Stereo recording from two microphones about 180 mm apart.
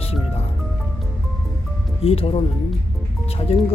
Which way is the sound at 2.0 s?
35° left (ahead or behind).